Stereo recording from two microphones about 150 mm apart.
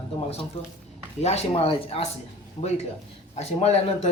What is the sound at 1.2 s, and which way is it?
Speech, 45° left (ahead or behind).